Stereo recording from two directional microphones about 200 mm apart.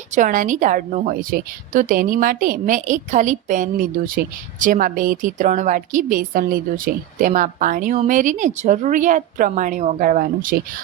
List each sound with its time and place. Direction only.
0.1 s a woman's voice: 40° right (ahead or behind)